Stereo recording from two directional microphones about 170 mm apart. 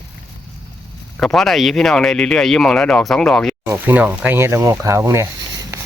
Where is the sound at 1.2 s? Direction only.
Centre (ahead or behind).